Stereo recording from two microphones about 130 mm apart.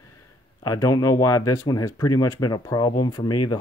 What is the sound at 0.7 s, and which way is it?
Speech, 25° left (ahead or behind).